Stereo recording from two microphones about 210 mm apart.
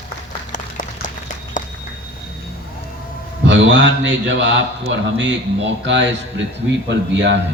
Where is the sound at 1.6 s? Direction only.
40° left (ahead or behind).